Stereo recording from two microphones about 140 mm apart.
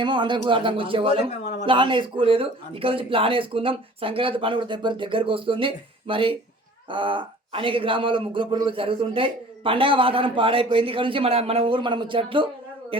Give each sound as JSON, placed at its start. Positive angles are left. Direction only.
{"t": 0.0, "sound": "a man's voice", "side_deg": -35}